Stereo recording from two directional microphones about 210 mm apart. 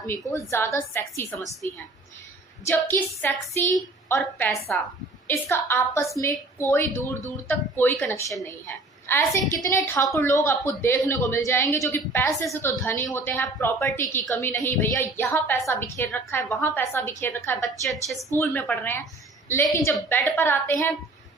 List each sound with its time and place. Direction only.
0.3 s a woman's voice: 10° left (ahead or behind)
2.6 s a woman's voice: 10° left (ahead or behind)